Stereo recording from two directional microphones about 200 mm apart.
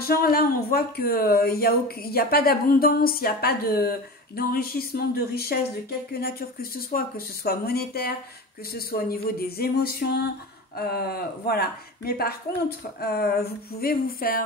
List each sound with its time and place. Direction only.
0.0 s speech: 50° left (ahead or behind)